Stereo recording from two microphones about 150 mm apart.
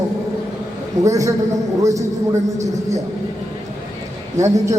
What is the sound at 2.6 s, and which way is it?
Speech, 20° right (ahead or behind).